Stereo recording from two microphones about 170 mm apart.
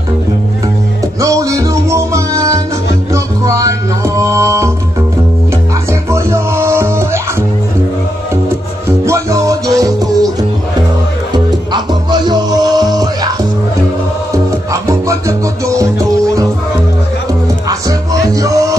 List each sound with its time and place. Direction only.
1.2 s music: 20° right (ahead or behind)
9.0 s music: 20° right (ahead or behind)
11.3 s music: 25° right (ahead or behind)
14.3 s music: 20° right (ahead or behind)